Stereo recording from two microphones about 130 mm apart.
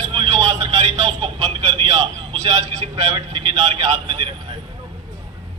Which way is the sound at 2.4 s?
55° right (ahead or behind).